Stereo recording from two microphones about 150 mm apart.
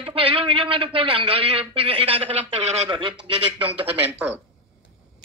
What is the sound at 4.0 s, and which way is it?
Speech, 10° right (ahead or behind).